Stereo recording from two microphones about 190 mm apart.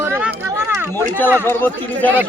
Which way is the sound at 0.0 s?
10° right (ahead or behind).